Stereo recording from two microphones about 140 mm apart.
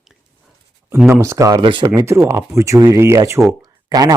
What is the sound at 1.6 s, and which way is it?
Speech, 35° right (ahead or behind).